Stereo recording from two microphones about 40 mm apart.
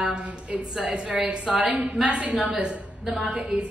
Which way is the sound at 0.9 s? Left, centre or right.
Centre.